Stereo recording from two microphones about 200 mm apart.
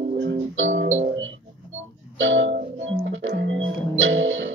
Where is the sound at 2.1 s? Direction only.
75° right (ahead or behind).